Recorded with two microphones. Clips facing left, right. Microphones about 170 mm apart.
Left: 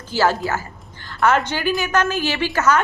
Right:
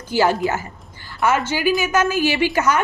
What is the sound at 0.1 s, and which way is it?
A woman's voice, 15° right (ahead or behind).